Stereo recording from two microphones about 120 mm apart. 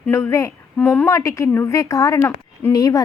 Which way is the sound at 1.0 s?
25° left (ahead or behind).